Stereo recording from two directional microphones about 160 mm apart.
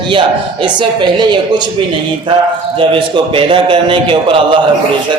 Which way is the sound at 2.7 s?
35° right (ahead or behind).